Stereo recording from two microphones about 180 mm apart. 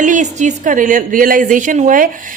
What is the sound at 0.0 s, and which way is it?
A woman's voice, 45° right (ahead or behind).